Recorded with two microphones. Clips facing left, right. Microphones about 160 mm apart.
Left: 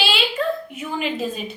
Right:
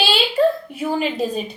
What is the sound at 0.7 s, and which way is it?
Speech, 35° right (ahead or behind).